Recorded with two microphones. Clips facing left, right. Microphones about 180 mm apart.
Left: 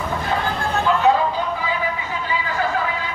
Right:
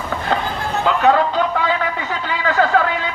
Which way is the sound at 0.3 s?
75° right (ahead or behind).